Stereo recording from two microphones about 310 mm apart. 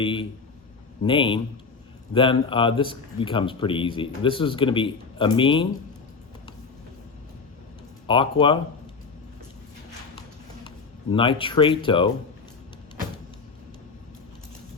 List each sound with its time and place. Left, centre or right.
0.0 s a man's voice: centre
8.0 s a man's voice: centre
11.1 s a man's voice: centre